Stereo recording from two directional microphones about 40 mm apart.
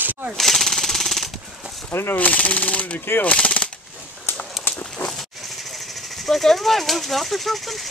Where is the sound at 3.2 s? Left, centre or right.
Left.